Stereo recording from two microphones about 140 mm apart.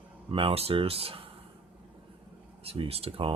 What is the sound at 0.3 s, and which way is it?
Speech, 40° right (ahead or behind).